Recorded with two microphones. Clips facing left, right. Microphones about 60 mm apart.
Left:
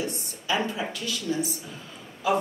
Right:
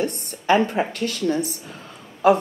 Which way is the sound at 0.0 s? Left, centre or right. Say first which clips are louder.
Right 7 dB; right.